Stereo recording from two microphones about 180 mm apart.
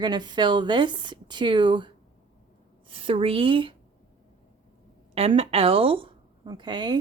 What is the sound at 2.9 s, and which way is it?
Speech, 30° right (ahead or behind).